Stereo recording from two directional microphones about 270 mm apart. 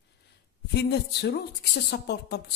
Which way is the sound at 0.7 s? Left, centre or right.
Left.